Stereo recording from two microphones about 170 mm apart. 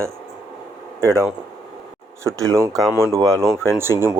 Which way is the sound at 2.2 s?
20° right (ahead or behind).